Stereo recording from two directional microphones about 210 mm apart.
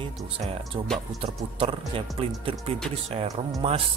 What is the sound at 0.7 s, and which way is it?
A man's voice, 20° right (ahead or behind).